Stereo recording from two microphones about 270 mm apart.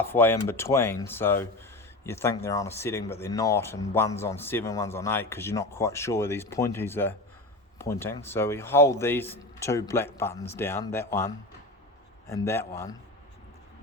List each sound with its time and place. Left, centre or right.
0.0 s speech: centre
12.3 s speech: centre